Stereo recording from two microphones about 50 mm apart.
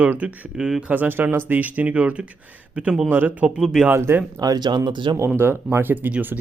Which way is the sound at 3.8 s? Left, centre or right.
Right.